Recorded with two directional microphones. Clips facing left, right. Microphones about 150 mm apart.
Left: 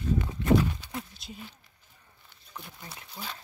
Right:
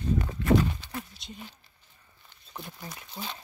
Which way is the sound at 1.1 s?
Centre (ahead or behind).